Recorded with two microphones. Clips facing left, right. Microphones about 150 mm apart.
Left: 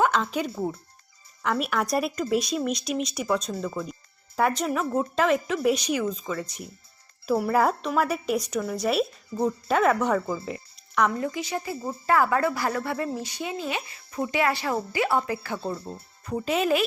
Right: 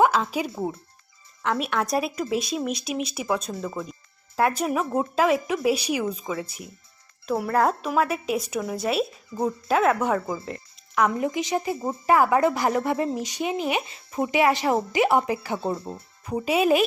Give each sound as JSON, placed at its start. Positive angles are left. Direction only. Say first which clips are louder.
{"t": 0.0, "sound": "speech", "louder": "right 3 dB", "side_deg": -5}
{"t": 1.4, "sound": "speech", "louder": "right 1 dB", "side_deg": 0}
{"t": 7.3, "sound": "speech", "louder": "even", "side_deg": 5}
{"t": 9.3, "sound": "speech", "louder": "left 1 dB", "side_deg": 35}
{"t": 9.6, "sound": "speech", "louder": "right 1 dB", "side_deg": 0}
{"t": 10.4, "sound": "music", "louder": "left 1 dB", "side_deg": 0}
{"t": 11.1, "sound": "speech", "louder": "right 4 dB", "side_deg": -15}